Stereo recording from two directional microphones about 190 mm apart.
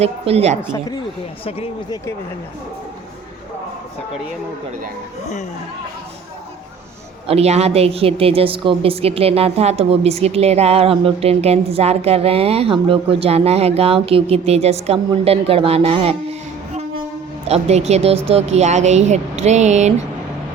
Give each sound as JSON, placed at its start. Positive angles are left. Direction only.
{"t": 0.0, "sound": "a woman's voice", "side_deg": -35}
{"t": 1.5, "sound": "speech", "side_deg": 30}
{"t": 7.3, "sound": "a woman's voice", "side_deg": -35}
{"t": 17.5, "sound": "a woman's voice", "side_deg": -35}